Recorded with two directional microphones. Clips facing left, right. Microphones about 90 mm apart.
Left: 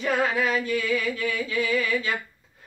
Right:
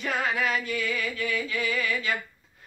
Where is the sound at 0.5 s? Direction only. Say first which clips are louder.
Left 4 dB; 30° left (ahead or behind).